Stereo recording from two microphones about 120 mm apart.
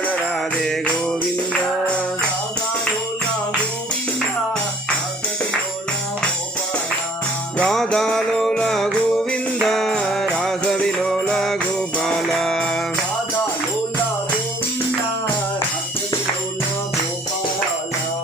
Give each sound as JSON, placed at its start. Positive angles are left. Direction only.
{"t": 7.6, "sound": "music", "side_deg": 5}